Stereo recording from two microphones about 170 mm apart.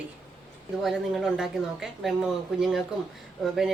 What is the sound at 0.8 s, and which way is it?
Speech, centre (ahead or behind).